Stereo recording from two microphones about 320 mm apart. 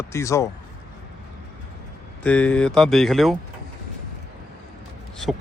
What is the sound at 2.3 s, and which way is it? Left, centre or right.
Speech, centre.